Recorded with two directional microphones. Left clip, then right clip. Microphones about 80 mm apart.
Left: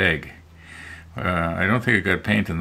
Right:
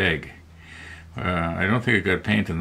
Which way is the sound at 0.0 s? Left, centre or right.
Left.